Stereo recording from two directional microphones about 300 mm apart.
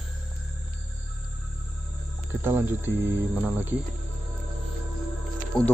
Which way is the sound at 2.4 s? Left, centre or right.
Centre.